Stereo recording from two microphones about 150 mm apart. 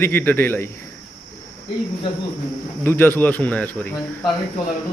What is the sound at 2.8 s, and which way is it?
Speech, 15° left (ahead or behind).